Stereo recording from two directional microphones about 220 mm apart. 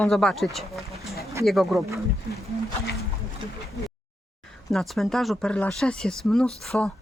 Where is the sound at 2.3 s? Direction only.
45° left (ahead or behind).